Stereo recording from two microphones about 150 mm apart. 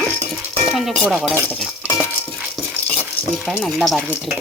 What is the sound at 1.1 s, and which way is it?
Speech, 5° right (ahead or behind).